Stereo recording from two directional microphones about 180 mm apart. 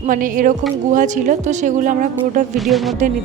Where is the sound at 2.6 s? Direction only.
Centre (ahead or behind).